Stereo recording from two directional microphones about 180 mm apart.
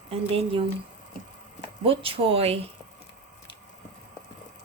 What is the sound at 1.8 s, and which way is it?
Speech, 30° right (ahead or behind).